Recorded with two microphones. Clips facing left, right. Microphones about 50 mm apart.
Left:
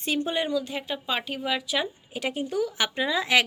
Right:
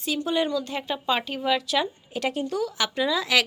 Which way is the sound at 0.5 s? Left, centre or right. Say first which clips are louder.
Right 1 dB; centre.